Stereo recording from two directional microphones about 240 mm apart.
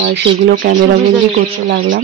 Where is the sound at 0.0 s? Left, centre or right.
Right.